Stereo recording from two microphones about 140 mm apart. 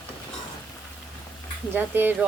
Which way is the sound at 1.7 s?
15° right (ahead or behind).